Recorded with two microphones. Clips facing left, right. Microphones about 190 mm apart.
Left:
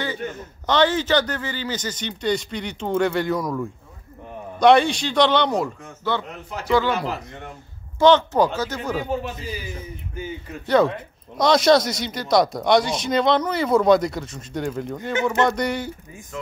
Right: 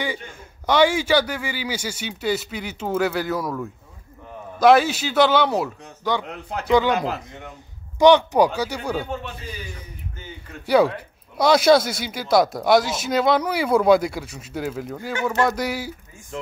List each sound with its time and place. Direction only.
0.3 s a man's voice: 10° right (ahead or behind)
9.0 s a man's voice: 10° left (ahead or behind)
11.3 s speech: 5° right (ahead or behind)